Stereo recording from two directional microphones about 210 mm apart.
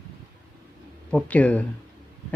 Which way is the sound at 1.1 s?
5° left (ahead or behind).